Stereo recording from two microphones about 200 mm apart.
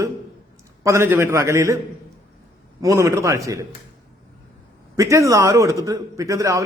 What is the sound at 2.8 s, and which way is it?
Speech, 15° right (ahead or behind).